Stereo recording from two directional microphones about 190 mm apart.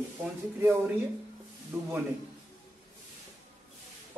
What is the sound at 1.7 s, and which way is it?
Speech, 5° right (ahead or behind).